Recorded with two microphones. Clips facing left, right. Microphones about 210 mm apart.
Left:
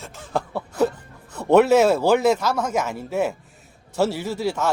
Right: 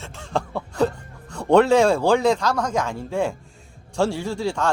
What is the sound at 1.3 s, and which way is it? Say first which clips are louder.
Speech: left 1 dB; 5° left (ahead or behind).